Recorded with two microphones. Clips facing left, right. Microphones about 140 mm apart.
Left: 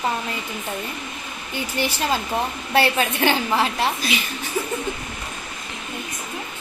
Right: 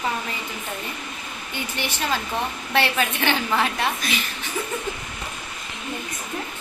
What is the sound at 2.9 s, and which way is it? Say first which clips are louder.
Speech: left 3 dB; 35° left (ahead or behind).